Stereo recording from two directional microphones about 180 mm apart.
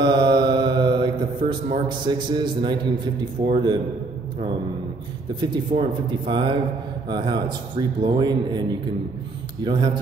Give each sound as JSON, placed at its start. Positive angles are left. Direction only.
{"t": 0.0, "sound": "mantra", "side_deg": -25}
{"t": 5.3, "sound": "speech", "side_deg": -25}